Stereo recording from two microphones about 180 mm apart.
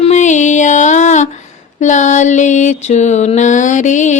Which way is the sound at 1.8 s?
40° left (ahead or behind).